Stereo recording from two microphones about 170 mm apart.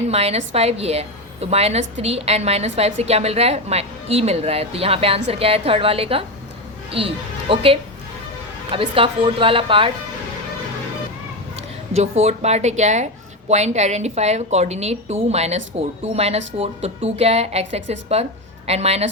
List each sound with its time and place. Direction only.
0.1 s a woman's voice: 35° right (ahead or behind)
11.9 s a woman's voice: 40° right (ahead or behind)